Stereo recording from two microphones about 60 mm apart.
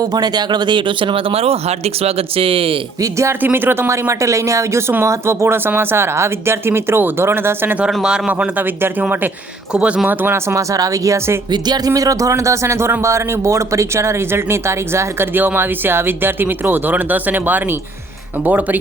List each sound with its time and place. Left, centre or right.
3.0 s speech: right
3.4 s a man's voice: right
8.0 s a man's voice: centre
8.3 s speech: right
9.7 s speech: centre
10.1 s speech: right
10.3 s a man's voice: right
15.3 s speech: right